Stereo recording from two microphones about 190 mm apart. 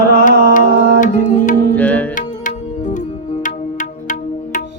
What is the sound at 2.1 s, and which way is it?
Music, 40° left (ahead or behind).